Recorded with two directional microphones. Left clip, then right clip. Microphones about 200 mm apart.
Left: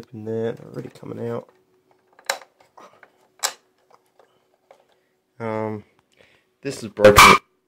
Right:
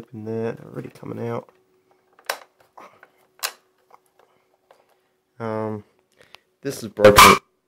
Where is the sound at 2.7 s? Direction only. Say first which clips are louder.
Right 3 dB; 20° right (ahead or behind).